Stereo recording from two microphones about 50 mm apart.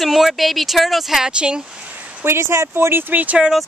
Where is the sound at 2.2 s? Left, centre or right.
Right.